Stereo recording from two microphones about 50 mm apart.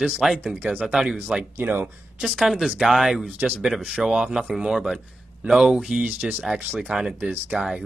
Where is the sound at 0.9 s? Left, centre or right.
Centre.